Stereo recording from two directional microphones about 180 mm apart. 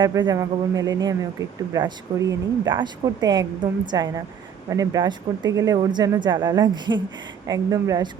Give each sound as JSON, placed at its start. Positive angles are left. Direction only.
{"t": 0.0, "sound": "speech", "side_deg": -25}